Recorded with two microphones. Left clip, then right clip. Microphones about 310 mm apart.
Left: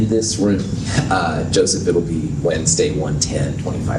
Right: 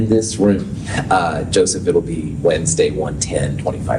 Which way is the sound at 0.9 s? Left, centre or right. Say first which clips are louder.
Right 3 dB; right.